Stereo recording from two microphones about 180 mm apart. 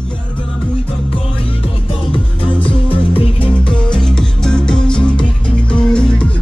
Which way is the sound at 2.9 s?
30° left (ahead or behind).